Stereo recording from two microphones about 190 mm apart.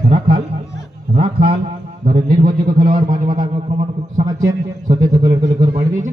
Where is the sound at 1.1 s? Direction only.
30° right (ahead or behind).